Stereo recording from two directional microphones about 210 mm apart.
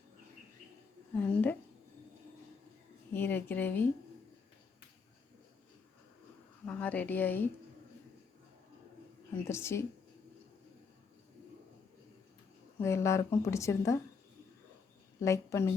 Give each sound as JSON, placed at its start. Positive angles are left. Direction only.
{"t": 1.1, "sound": "a woman's voice", "side_deg": 10}
{"t": 3.1, "sound": "a woman's voice", "side_deg": 10}
{"t": 6.7, "sound": "a woman's voice", "side_deg": 5}
{"t": 9.5, "sound": "a woman's voice", "side_deg": 15}
{"t": 12.8, "sound": "a woman's voice", "side_deg": 15}
{"t": 15.2, "sound": "a woman's voice", "side_deg": 15}